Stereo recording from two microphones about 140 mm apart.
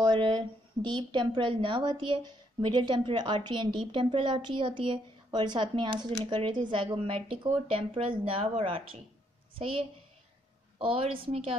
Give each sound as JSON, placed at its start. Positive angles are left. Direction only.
{"t": 0.0, "sound": "speech", "side_deg": -30}